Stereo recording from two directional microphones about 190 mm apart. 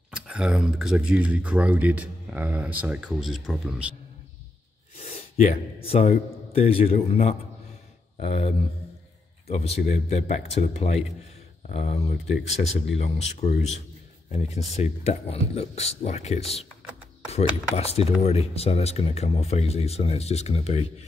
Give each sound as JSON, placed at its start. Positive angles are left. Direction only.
{"t": 0.1, "sound": "speech", "side_deg": -5}
{"t": 5.0, "sound": "a man's voice", "side_deg": 35}